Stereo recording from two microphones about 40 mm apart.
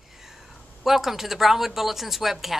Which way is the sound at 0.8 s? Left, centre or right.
Centre.